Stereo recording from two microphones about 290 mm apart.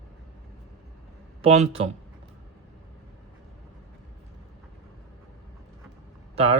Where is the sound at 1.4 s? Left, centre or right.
Right.